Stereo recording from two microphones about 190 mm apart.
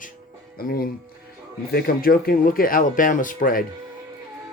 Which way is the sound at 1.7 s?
55° left (ahead or behind).